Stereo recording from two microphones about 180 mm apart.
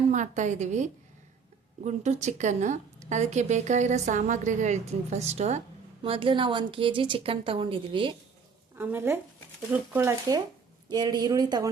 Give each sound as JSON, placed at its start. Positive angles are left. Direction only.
{"t": 0.1, "sound": "a woman's voice", "side_deg": -40}
{"t": 8.8, "sound": "a woman's voice", "side_deg": -10}